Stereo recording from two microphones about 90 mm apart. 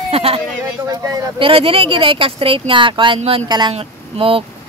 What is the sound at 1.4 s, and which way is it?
Speech, 85° right.